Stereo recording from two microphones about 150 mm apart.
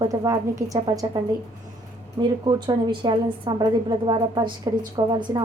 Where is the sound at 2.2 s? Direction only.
30° right (ahead or behind).